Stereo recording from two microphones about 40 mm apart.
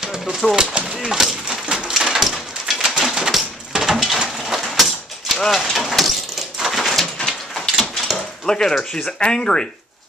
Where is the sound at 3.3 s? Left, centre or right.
Centre.